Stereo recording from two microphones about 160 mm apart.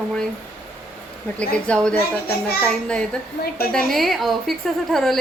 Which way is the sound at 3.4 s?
75° left (ahead or behind).